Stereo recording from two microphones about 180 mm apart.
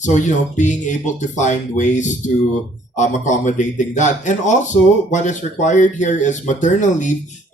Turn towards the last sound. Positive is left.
turn(degrees=45)  # may be behind; listen again after turning